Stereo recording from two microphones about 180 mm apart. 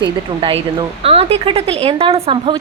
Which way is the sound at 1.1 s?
35° right (ahead or behind).